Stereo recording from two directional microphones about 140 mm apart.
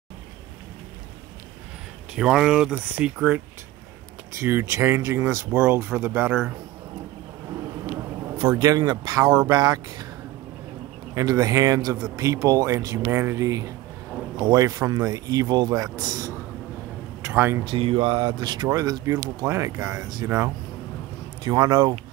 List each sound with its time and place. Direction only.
2.1 s speech: 5° right (ahead or behind)
8.5 s speech: 30° right (ahead or behind)
11.1 s speech: 25° right (ahead or behind)
17.6 s speech: 40° right (ahead or behind)